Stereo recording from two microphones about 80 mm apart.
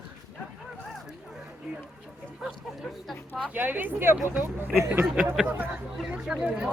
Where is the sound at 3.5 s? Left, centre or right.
Right.